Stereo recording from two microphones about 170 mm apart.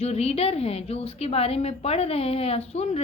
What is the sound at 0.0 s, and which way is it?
Speech, 40° left (ahead or behind).